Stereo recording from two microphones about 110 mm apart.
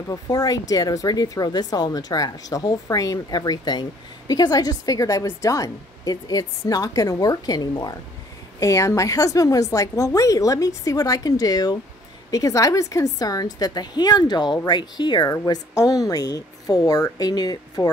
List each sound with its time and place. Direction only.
0.1 s speech: 35° left (ahead or behind)